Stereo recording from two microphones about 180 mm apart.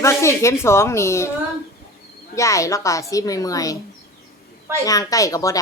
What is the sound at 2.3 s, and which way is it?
Speech, 15° left (ahead or behind).